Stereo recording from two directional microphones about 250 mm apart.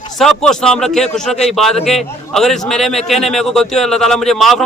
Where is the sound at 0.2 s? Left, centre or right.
Centre.